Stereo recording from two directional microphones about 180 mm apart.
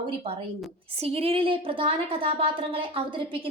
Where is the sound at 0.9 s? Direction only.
35° right (ahead or behind).